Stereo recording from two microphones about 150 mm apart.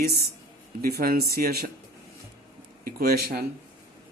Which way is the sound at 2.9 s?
75° right (ahead or behind).